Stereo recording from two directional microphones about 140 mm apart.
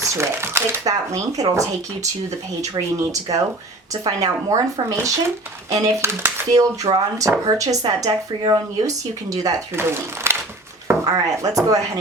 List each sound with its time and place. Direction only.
0.0 s speech: 20° right (ahead or behind)
10.3 s a sound: 20° right (ahead or behind)
10.8 s speech: 25° right (ahead or behind)